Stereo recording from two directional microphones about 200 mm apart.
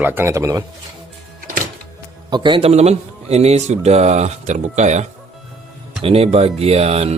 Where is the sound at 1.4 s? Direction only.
40° right (ahead or behind).